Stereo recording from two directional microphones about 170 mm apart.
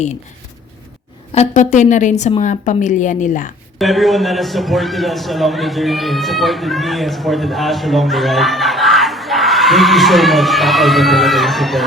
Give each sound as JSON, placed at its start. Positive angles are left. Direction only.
{"t": 1.3, "sound": "a woman's voice", "side_deg": 45}
{"t": 3.8, "sound": "a man's voice", "side_deg": 0}